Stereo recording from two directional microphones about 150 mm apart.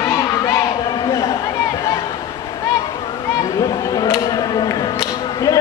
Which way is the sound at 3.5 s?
25° left (ahead or behind).